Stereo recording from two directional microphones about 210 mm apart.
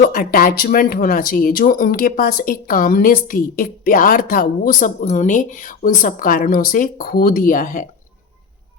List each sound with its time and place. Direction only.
0.0 s speech: 40° left (ahead or behind)